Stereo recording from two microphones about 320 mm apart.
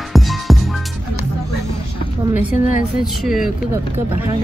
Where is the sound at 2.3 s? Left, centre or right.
Left.